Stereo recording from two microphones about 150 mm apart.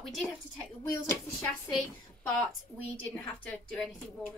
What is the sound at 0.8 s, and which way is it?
Speech, 25° left (ahead or behind).